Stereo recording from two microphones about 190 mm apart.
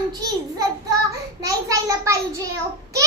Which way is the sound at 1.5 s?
15° right (ahead or behind).